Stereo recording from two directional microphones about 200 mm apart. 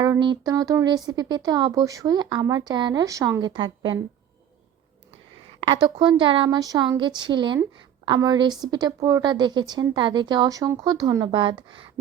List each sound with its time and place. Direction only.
0.0 s speech: 20° right (ahead or behind)
5.5 s speech: 25° right (ahead or behind)